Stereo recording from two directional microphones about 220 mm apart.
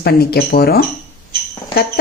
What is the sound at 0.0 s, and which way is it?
Speech, 45° left (ahead or behind).